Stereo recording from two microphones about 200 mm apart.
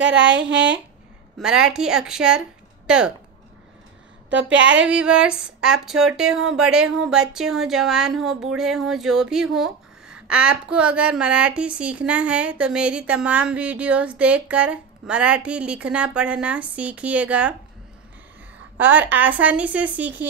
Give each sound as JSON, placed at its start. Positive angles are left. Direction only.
{"t": 0.1, "sound": "speech", "side_deg": -65}
{"t": 1.4, "sound": "speech", "side_deg": -5}
{"t": 4.3, "sound": "a woman's voice", "side_deg": -65}
{"t": 4.7, "sound": "speech", "side_deg": -5}
{"t": 18.8, "sound": "speech", "side_deg": -10}